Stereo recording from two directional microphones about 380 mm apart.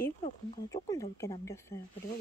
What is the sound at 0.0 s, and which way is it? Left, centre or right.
Speech, centre.